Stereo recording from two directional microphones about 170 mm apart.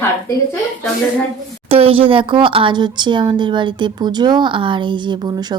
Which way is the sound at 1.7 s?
35° right (ahead or behind).